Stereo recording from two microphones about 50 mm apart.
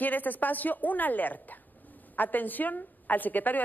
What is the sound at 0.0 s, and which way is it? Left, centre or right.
A woman's voice, left.